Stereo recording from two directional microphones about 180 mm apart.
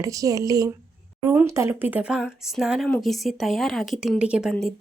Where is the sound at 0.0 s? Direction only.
20° right (ahead or behind).